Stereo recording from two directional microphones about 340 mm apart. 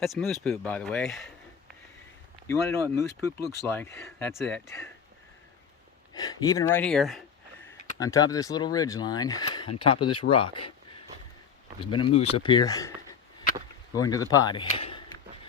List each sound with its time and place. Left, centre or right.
0.0 s speech: centre
2.5 s speech: centre
6.1 s speech: centre
11.8 s speech: centre
13.9 s speech: centre